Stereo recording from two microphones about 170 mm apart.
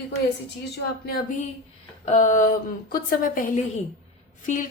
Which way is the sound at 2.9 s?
60° left (ahead or behind).